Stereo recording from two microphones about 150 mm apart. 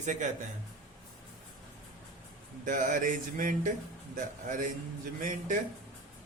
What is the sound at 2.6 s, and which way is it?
Speech, 60° right (ahead or behind).